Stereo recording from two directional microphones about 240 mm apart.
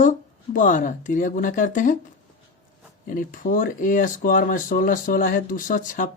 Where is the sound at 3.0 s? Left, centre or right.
Left.